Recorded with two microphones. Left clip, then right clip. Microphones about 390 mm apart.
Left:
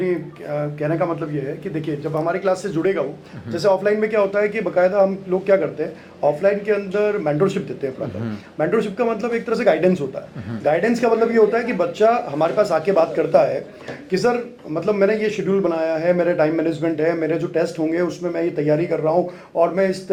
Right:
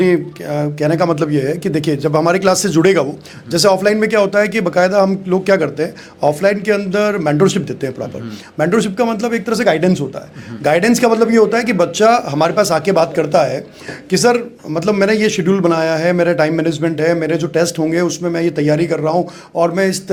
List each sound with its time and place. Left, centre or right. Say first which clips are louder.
0.0 s speech: right 9 dB; right
0.5 s a man's voice: right 6 dB; right
3.5 s a man's voice: right 5 dB; right
10.6 s a man's voice: right 5 dB; right